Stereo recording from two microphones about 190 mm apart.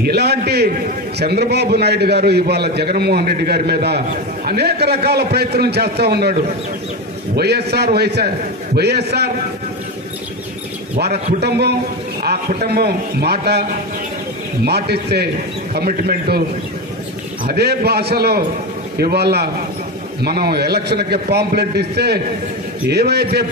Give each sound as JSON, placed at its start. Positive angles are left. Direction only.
{"t": 0.0, "sound": "a man's voice", "side_deg": -60}
{"t": 7.3, "sound": "a man's voice", "side_deg": -60}
{"t": 11.4, "sound": "a man's voice", "side_deg": -60}
{"t": 17.5, "sound": "a man's voice", "side_deg": -55}